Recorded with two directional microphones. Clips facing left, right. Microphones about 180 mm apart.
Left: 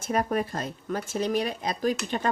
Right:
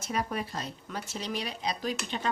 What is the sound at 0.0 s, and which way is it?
Speech, 50° left (ahead or behind).